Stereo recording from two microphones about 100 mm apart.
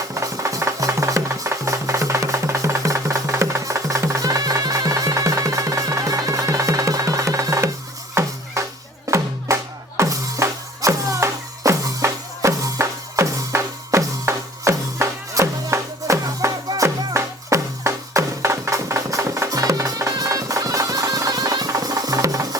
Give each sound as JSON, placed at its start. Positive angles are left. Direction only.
{"t": 0.1, "sound": "music", "side_deg": -30}